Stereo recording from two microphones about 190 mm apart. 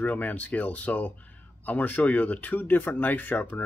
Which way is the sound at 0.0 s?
10° left (ahead or behind).